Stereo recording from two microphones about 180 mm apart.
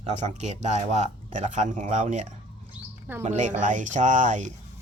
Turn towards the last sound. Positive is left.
turn(degrees=-45)  # may be behind; listen again after turning